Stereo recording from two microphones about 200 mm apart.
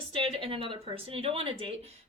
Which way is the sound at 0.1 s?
25° right (ahead or behind).